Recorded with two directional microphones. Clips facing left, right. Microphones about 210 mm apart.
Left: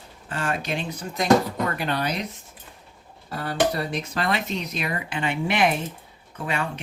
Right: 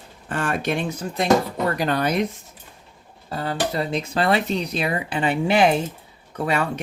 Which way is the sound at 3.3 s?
25° right (ahead or behind).